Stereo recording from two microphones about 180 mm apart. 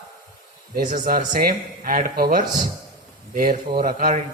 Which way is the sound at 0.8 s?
55° right (ahead or behind).